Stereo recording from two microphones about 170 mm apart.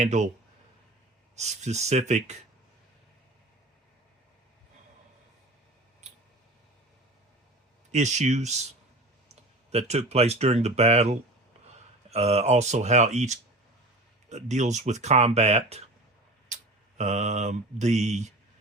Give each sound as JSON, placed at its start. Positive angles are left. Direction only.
{"t": 0.0, "sound": "mantra", "side_deg": -45}
{"t": 1.4, "sound": "speech", "side_deg": -40}
{"t": 6.0, "sound": "a sound", "side_deg": -45}
{"t": 7.9, "sound": "mantra", "side_deg": -40}
{"t": 9.3, "sound": "speech", "side_deg": -40}
{"t": 17.0, "sound": "mantra", "side_deg": -45}